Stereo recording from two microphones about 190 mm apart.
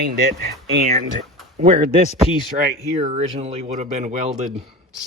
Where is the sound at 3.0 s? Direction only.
30° right (ahead or behind).